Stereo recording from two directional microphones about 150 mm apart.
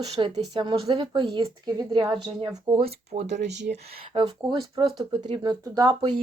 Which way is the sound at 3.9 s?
40° right (ahead or behind).